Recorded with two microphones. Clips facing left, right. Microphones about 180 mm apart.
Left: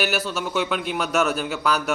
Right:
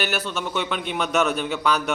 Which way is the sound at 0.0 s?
5° left (ahead or behind).